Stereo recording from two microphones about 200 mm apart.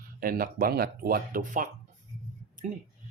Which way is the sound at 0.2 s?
45° right (ahead or behind).